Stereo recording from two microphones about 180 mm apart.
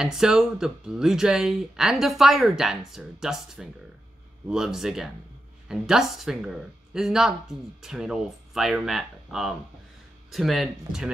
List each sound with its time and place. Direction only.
0.0 s speech: centre (ahead or behind)